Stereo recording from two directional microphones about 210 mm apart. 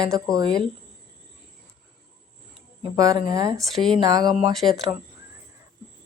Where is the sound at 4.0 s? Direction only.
20° right (ahead or behind).